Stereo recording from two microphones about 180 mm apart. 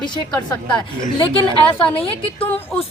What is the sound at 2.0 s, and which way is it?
Speech, 30° left (ahead or behind).